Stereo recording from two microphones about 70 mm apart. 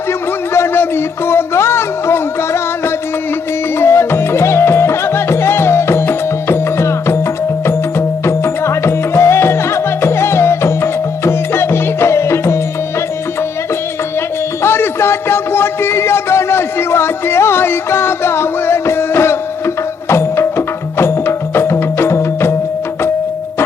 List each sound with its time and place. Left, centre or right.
0.5 s a sound: left
3.8 s music: left
14.6 s music: left